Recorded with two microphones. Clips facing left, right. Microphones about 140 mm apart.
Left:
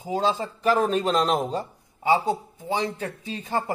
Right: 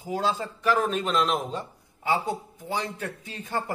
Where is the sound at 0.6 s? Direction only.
35° left (ahead or behind).